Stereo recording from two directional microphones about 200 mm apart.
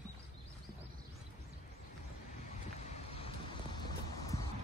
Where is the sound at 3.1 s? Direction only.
25° left (ahead or behind).